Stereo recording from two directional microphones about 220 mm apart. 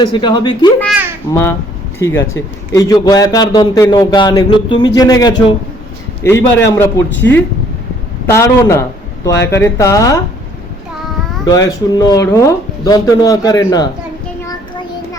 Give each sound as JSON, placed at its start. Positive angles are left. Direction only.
{"t": 0.0, "sound": "a man's voice", "side_deg": 20}
{"t": 11.4, "sound": "a man's voice", "side_deg": 15}